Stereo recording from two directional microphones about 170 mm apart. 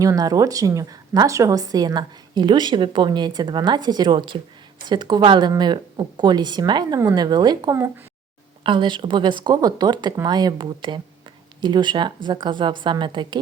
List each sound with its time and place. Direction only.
0.0 s a woman's voice: 20° right (ahead or behind)